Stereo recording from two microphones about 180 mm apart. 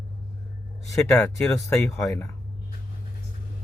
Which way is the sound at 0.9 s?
15° left (ahead or behind).